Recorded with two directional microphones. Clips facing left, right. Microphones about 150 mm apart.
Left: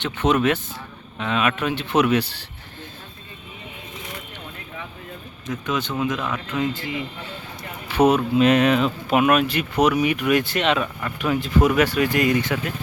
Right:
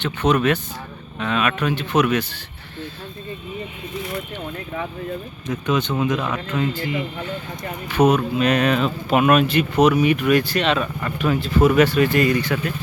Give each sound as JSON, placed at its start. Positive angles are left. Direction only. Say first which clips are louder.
{"t": 0.0, "sound": "speech", "louder": "right 1 dB", "side_deg": 20}
{"t": 5.5, "sound": "speech", "louder": "right 4 dB", "side_deg": 0}
{"t": 7.9, "sound": "speech", "louder": "even", "side_deg": 30}